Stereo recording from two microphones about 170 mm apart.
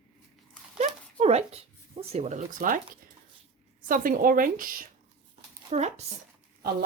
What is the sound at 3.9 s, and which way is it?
A woman's voice, 55° right (ahead or behind).